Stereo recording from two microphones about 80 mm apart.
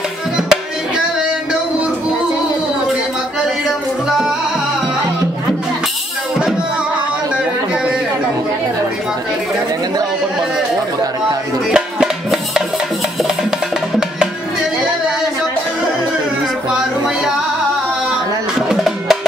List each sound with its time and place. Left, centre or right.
0.4 s music: centre
7.7 s chatter: centre
11.7 s music: centre
18.7 s music: centre